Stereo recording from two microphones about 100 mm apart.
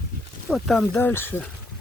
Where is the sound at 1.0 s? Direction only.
20° left (ahead or behind).